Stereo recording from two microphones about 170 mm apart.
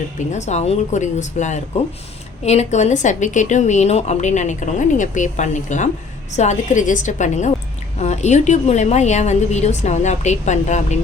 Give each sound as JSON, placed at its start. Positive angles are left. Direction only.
{"t": 0.2, "sound": "a woman's voice", "side_deg": 45}